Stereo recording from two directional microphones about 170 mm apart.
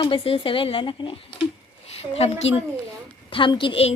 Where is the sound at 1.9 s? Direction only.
35° left (ahead or behind).